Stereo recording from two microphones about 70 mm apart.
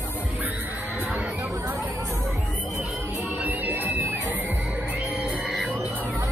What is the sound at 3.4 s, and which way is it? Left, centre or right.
Music, right.